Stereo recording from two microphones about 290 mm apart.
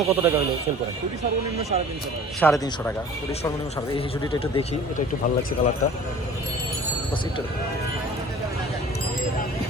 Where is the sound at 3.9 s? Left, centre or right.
Centre.